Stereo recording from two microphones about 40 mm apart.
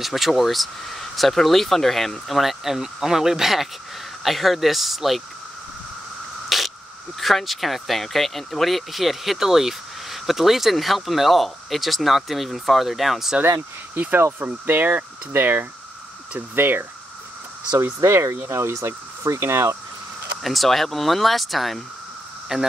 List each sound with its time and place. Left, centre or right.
0.0 s speech: centre
6.5 s a sound: centre
7.2 s speech: centre
13.9 s speech: right
15.3 s speech: right
18.1 s speech: right
20.4 s speech: centre
22.5 s speech: centre